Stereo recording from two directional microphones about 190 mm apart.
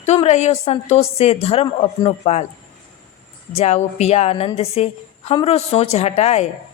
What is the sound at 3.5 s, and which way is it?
A man's voice, 35° left (ahead or behind).